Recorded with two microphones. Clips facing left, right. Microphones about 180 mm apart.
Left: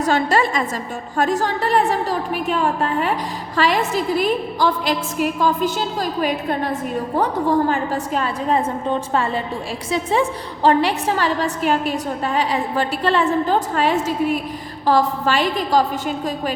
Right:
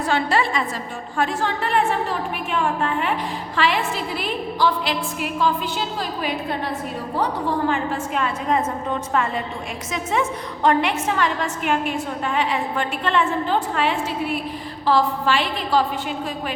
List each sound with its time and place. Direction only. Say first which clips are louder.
0.0 s a woman's voice: left 3 dB; 40° left (ahead or behind)